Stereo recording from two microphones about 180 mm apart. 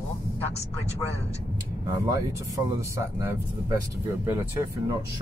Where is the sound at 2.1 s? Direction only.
15° right (ahead or behind).